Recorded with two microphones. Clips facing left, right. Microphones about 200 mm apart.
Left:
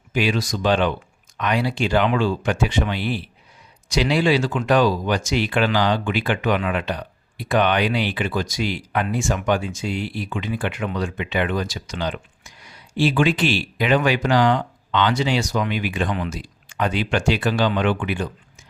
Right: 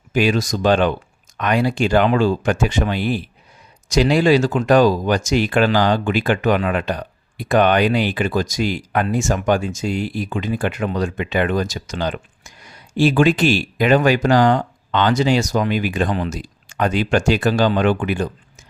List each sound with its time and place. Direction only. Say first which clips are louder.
0.1 s speech: right 4 dB; 45° right (ahead or behind)